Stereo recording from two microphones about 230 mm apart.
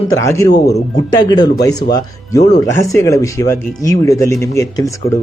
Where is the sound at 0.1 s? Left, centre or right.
Centre.